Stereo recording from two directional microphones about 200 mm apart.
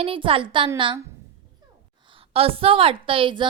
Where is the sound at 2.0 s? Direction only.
25° right (ahead or behind).